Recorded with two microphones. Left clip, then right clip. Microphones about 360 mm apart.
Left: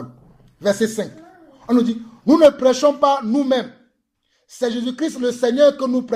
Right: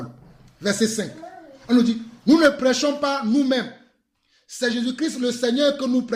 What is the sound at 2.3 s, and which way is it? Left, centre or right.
Speech, centre.